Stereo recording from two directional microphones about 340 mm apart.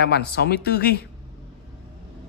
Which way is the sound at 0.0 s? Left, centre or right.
Left.